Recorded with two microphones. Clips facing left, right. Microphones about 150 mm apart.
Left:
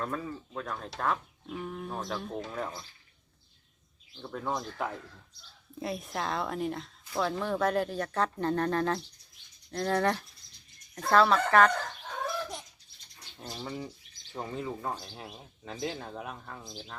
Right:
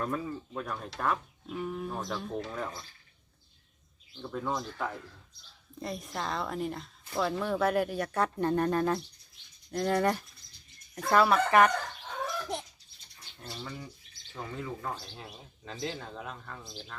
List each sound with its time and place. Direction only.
0.0 s a woman's voice: 10° right (ahead or behind)
4.2 s speech: 10° left (ahead or behind)
5.8 s a woman's voice: centre (ahead or behind)
13.4 s speech: 35° left (ahead or behind); by 16.6 s 15° left (ahead or behind)